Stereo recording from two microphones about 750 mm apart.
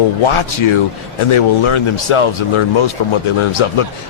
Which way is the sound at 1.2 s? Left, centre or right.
Left.